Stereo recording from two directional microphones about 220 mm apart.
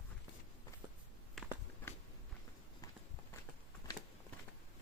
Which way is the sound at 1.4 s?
Centre (ahead or behind).